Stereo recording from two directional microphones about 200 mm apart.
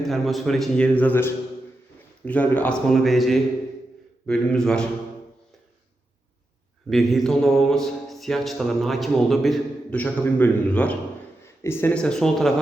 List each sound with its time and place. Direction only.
0.0 s speech: centre (ahead or behind)
6.9 s speech: centre (ahead or behind)